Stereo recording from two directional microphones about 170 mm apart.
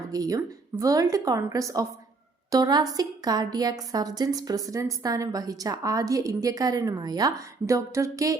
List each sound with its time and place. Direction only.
0.1 s a woman's voice: 20° right (ahead or behind)